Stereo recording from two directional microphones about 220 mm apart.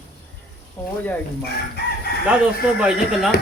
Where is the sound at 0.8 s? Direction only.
10° left (ahead or behind).